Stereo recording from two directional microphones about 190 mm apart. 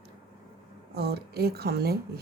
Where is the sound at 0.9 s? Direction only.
55° right (ahead or behind).